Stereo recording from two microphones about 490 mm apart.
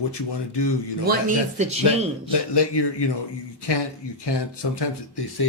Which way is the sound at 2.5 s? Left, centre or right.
Left.